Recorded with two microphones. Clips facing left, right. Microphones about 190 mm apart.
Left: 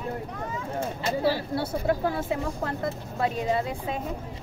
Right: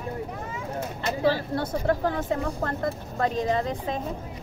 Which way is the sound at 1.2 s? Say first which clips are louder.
Right 3 dB; 10° left (ahead or behind).